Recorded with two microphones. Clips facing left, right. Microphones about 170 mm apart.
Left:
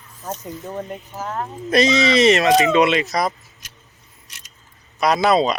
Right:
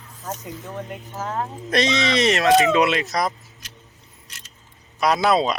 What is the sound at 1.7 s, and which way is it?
Speech, 5° left (ahead or behind).